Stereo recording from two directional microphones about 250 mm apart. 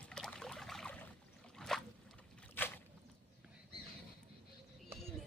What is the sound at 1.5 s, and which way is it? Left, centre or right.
Boat, centre.